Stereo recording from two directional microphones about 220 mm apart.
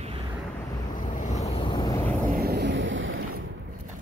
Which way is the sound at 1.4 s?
25° left (ahead or behind).